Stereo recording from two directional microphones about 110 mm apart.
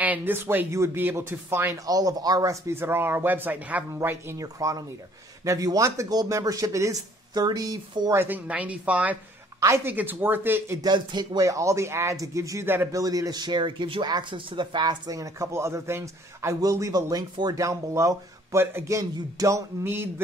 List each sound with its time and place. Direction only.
0.0 s speech: 15° right (ahead or behind)
1.9 s speech: 35° right (ahead or behind); by 4.4 s 20° right (ahead or behind)
4.4 s speech: 30° right (ahead or behind)
8.1 s speech: 20° right (ahead or behind)
8.5 s speech: 10° right (ahead or behind)
10.8 s speech: 40° right (ahead or behind); by 12.9 s 20° right (ahead or behind)
12.9 s speech: 30° right (ahead or behind)